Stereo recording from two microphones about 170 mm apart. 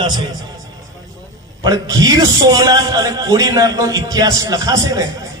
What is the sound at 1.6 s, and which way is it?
A man's voice, 20° right (ahead or behind).